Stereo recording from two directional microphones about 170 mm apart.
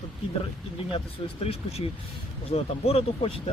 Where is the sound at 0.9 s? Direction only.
35° left (ahead or behind).